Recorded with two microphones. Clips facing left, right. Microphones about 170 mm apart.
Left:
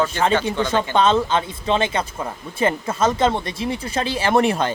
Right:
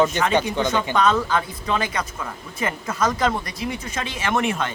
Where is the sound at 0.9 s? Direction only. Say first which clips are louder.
Left 3 dB; 25° left (ahead or behind).